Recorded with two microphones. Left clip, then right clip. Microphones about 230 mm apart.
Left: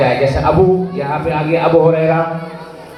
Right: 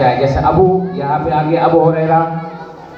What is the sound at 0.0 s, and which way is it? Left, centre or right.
A man's voice, left.